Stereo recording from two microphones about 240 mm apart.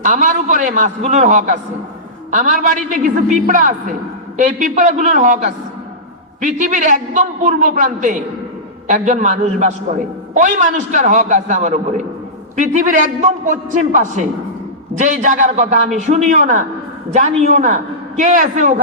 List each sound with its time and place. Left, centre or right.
0.0 s a man's voice: right